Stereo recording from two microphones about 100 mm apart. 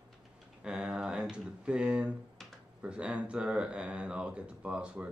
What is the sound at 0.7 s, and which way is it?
Typing, 10° right (ahead or behind).